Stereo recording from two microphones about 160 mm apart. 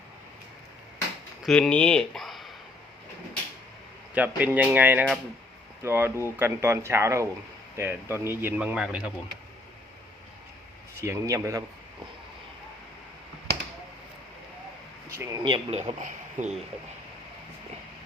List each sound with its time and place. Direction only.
1.5 s speech: 5° left (ahead or behind)
4.1 s speech: 10° right (ahead or behind)
11.0 s speech: 20° right (ahead or behind)
15.1 s speech: 20° right (ahead or behind)
16.0 s speech: 50° right (ahead or behind)